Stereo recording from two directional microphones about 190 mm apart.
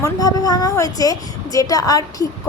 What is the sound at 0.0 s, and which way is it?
A woman's voice, 20° left (ahead or behind).